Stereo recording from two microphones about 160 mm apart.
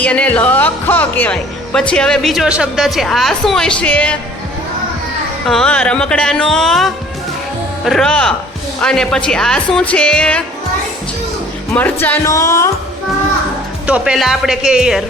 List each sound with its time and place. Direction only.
0.0 s speech: 10° left (ahead or behind)
5.5 s speech: 5° left (ahead or behind)
11.7 s speech: 10° left (ahead or behind)
13.8 s speech: 5° right (ahead or behind)